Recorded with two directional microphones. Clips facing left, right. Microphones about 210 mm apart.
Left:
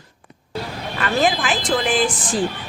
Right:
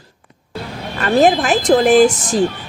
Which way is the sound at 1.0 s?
40° right (ahead or behind).